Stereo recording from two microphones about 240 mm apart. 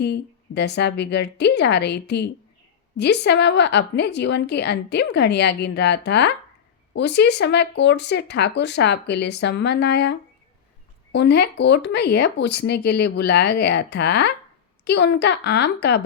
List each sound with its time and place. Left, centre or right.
0.0 s a woman's voice: left